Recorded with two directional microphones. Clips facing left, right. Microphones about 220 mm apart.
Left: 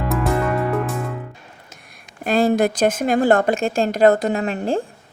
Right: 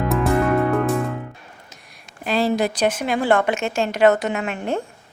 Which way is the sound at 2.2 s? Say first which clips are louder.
Left 3 dB; 45° left (ahead or behind).